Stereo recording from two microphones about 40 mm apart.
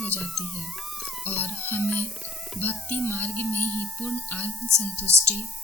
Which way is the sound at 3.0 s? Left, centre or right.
Left.